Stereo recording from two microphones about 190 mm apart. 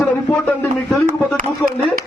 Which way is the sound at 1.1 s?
45° right (ahead or behind).